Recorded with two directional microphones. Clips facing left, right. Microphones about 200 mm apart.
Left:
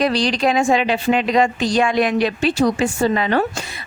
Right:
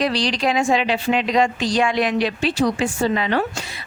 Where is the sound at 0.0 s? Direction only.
50° left (ahead or behind).